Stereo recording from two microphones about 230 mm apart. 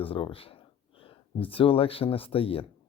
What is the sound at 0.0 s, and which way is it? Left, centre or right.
Speech, left.